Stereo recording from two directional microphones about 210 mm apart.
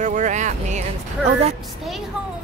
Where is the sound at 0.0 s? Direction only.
35° right (ahead or behind).